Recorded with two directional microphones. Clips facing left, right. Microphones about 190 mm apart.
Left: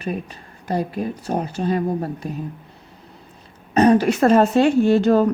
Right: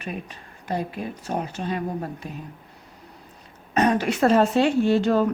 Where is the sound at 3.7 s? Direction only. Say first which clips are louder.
Left 6 dB; 35° left (ahead or behind).